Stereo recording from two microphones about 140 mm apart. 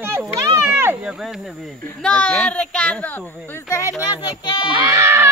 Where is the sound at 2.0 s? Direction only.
10° left (ahead or behind).